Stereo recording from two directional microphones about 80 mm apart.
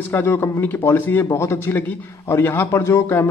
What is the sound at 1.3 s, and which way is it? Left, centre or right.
A man's voice, left.